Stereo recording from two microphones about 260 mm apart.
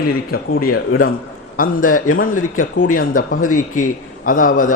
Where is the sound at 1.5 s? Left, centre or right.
Left.